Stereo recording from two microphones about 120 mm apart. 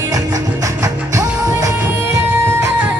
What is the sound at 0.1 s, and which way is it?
Music, 30° right (ahead or behind).